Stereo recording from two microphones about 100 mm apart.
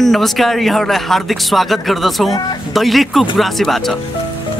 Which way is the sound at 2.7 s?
Centre (ahead or behind).